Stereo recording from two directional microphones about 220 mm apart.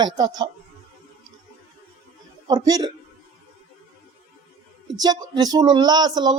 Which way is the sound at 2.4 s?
15° right (ahead or behind).